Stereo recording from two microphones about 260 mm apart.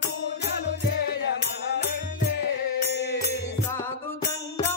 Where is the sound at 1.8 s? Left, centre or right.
Left.